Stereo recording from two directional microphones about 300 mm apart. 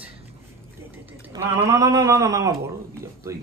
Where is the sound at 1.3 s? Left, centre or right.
Centre.